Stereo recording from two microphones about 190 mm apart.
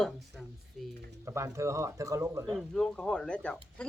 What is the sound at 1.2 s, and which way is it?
Speech, 15° right (ahead or behind).